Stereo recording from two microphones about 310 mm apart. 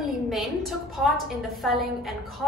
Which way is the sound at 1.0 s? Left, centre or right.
Centre.